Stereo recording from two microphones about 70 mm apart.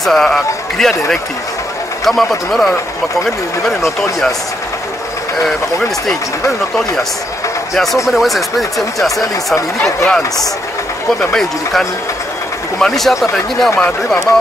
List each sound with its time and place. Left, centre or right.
0.0 s speech: centre
7.7 s speech: centre
13.7 s speech: centre